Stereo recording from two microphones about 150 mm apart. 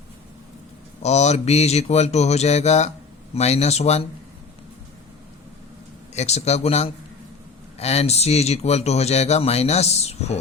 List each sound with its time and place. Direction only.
1.0 s speech: 45° left (ahead or behind)
6.1 s speech: 45° left (ahead or behind)